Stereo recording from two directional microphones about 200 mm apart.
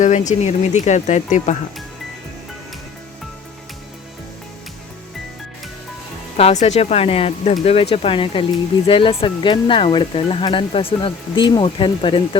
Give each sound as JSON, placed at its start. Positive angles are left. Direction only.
{"t": 0.0, "sound": "speech", "side_deg": 35}
{"t": 6.3, "sound": "speech", "side_deg": 35}